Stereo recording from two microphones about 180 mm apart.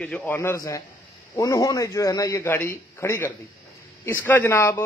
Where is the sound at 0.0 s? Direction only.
5° left (ahead or behind).